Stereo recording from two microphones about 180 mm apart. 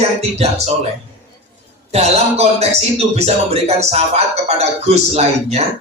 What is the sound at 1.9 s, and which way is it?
Speech, 35° right (ahead or behind).